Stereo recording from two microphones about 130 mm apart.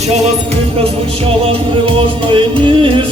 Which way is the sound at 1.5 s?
45° right (ahead or behind).